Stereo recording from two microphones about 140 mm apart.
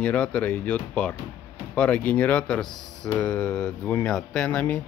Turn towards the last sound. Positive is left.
turn(degrees=10)  # may be behind; listen again after turning